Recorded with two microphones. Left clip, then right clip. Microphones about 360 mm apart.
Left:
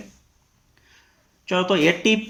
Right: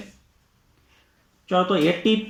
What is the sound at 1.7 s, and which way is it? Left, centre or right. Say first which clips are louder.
Speech: left 2 dB; left.